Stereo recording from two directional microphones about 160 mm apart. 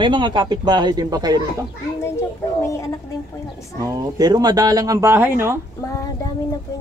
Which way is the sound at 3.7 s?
25° right (ahead or behind).